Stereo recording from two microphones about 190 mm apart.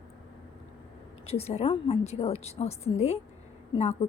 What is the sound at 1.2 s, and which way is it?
A woman's voice, 30° left (ahead or behind).